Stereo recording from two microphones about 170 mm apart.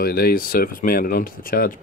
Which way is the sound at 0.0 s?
60° left (ahead or behind).